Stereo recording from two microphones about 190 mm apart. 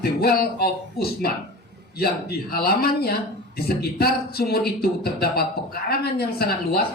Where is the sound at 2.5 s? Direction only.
55° left (ahead or behind).